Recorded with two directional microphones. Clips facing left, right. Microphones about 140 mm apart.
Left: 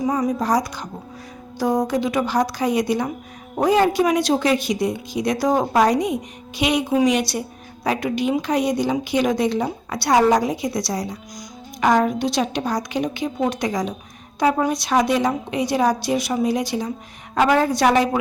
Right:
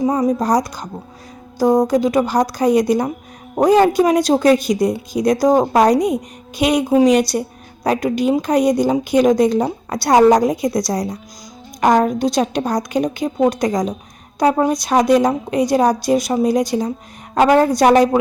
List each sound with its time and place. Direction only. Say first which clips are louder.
0.0 s a woman's voice: right 4 dB; 30° right (ahead or behind)